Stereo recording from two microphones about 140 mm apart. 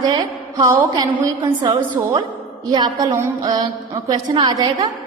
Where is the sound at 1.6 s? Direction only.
30° right (ahead or behind).